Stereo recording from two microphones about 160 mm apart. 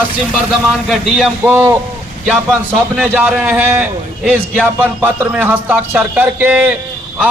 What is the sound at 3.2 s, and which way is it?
A man's voice, 10° right (ahead or behind).